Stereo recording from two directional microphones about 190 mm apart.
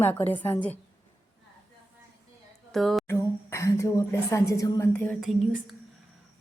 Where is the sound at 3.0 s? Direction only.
15° left (ahead or behind).